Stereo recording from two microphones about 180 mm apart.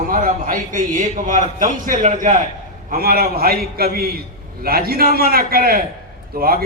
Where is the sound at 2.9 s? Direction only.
55° right (ahead or behind).